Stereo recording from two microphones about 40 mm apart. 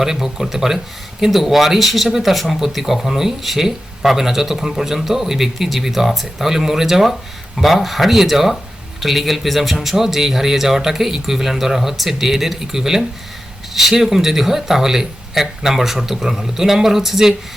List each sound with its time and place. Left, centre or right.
0.0 s speech: centre